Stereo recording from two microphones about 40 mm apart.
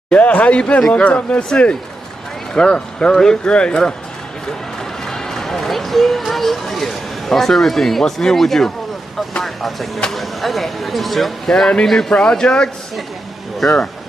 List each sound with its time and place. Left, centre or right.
0.1 s speech: left
5.0 s a man's voice: centre
12.1 s speech: left
13.6 s a man's voice: centre